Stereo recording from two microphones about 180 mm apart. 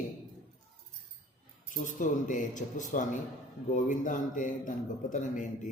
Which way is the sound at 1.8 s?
45° left (ahead or behind).